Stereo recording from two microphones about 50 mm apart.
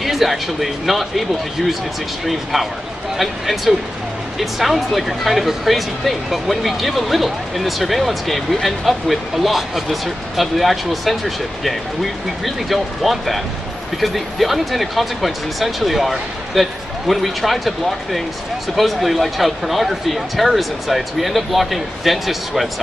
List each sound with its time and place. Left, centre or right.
0.0 s speech: centre